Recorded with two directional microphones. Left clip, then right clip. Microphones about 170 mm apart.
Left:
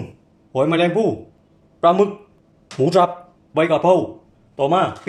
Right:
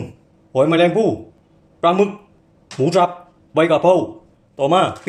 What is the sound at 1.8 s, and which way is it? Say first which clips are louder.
Speech: left 1 dB; 10° left (ahead or behind).